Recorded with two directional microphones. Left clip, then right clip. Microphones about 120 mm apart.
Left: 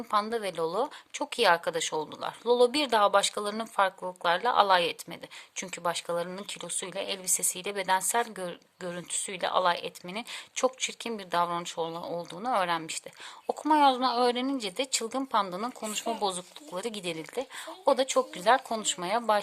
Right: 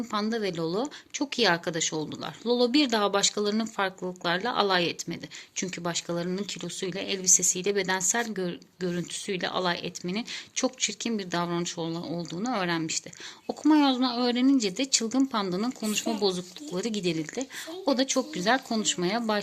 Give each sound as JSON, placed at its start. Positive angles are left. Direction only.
{"t": 0.1, "sound": "a woman's voice", "side_deg": 35}